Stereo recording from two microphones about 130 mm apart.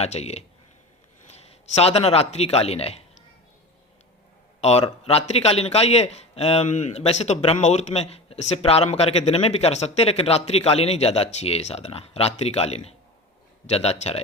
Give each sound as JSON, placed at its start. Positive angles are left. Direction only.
{"t": 0.0, "sound": "speech", "side_deg": 55}
{"t": 4.6, "sound": "a man's voice", "side_deg": 55}